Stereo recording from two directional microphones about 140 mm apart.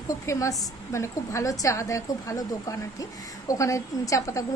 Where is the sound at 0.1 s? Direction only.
25° left (ahead or behind).